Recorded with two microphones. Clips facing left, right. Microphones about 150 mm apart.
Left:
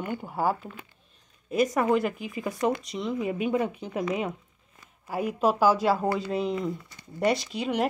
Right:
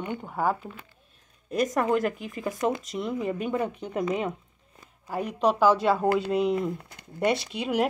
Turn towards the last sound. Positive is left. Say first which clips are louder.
# right 1 dB
turn(degrees=0)  # may be behind; listen again after turning